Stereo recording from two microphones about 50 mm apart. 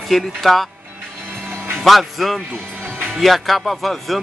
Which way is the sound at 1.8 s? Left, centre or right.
Centre.